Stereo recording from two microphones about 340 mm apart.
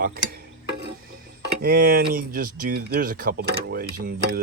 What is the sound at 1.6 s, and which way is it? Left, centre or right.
Speech, right.